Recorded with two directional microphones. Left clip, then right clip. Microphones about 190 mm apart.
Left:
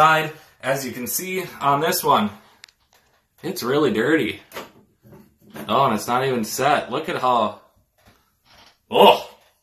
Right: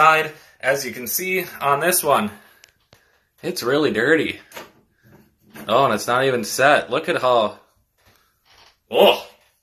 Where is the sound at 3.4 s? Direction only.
25° right (ahead or behind).